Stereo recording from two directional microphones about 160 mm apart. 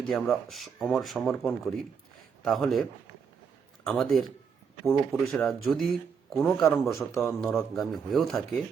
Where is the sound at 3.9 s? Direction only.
Centre (ahead or behind).